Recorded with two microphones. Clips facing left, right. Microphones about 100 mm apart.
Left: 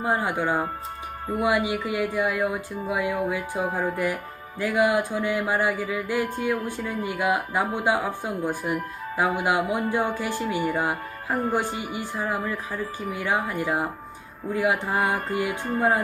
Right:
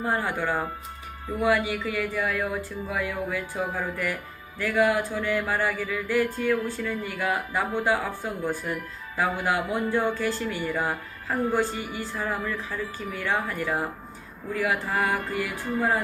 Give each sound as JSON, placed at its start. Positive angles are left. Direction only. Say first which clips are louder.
{"t": 0.0, "sound": "speech", "louder": "left 2 dB", "side_deg": 15}
{"t": 1.4, "sound": "music", "louder": "even", "side_deg": 15}
{"t": 4.6, "sound": "speech", "louder": "left 1 dB", "side_deg": 20}
{"t": 14.5, "sound": "music", "louder": "left 3 dB", "side_deg": 20}